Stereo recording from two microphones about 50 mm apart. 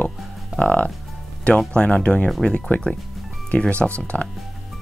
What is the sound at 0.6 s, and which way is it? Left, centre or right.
Speech, left.